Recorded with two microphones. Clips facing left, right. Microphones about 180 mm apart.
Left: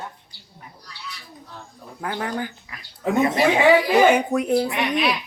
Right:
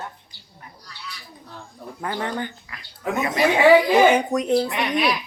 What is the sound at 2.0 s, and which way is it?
Speech, 5° left (ahead or behind).